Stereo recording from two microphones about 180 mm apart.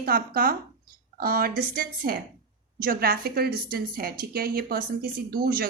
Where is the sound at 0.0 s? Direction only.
55° right (ahead or behind).